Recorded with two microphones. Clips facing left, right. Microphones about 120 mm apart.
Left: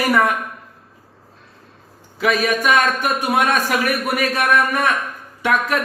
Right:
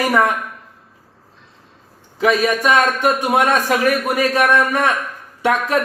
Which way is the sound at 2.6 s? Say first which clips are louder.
Right 2 dB; 35° right (ahead or behind).